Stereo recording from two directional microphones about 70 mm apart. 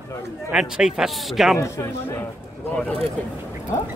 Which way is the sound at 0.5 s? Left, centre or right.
Centre.